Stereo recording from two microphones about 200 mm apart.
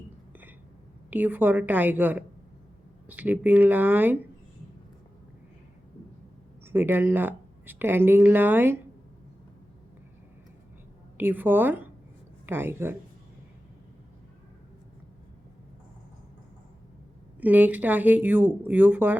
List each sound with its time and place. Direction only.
1.1 s speech: 10° right (ahead or behind)
6.7 s speech: 10° right (ahead or behind)
11.2 s speech: 10° right (ahead or behind)
17.4 s speech: 10° right (ahead or behind)